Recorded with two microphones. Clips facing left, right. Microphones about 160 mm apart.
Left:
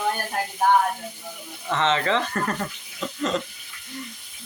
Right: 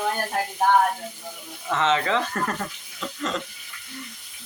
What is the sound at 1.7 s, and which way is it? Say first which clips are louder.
Speech: even; 5° right (ahead or behind).